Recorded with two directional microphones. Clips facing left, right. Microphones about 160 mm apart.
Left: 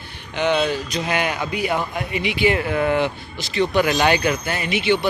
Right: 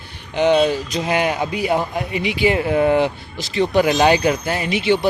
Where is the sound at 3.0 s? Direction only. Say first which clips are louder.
Right 3 dB; 35° right (ahead or behind).